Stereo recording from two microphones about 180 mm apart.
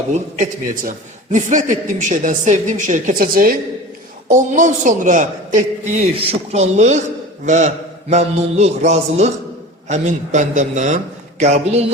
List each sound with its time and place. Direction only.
0.9 s a woman's voice: 45° right (ahead or behind)